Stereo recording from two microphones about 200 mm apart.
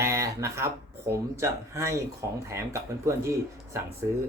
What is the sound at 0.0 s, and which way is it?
Speech, 15° right (ahead or behind).